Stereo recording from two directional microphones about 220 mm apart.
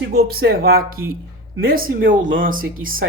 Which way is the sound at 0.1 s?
45° right (ahead or behind).